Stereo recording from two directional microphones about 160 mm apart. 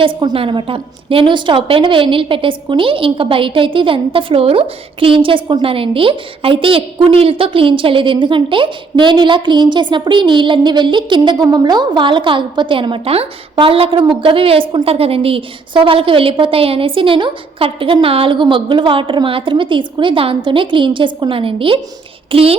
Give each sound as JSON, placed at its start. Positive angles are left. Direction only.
{"t": 0.2, "sound": "a woman's voice", "side_deg": -30}